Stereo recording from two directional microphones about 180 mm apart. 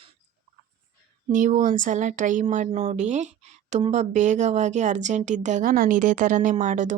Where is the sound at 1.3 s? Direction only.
45° right (ahead or behind).